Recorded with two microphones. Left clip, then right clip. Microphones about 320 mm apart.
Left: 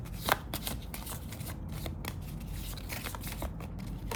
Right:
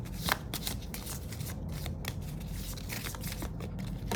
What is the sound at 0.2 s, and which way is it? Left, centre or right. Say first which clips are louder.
Shuffling cards: left 2 dB; centre.